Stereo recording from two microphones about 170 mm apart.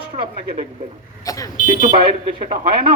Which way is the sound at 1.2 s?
20° left (ahead or behind).